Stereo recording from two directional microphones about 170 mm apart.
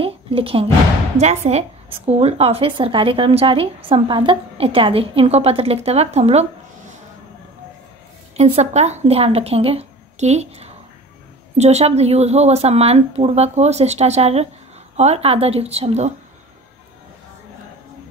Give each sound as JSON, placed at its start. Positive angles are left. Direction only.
{"t": 0.0, "sound": "a sound", "side_deg": -35}
{"t": 1.1, "sound": "speech", "side_deg": -40}
{"t": 8.4, "sound": "speech", "side_deg": -40}